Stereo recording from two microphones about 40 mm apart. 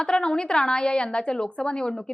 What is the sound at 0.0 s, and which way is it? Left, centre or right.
A woman's voice, left.